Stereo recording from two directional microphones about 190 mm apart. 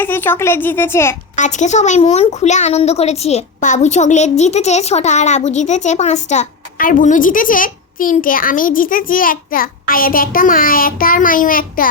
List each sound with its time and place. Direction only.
0.0 s speech: 10° left (ahead or behind)
1.4 s a woman's voice: 40° left (ahead or behind)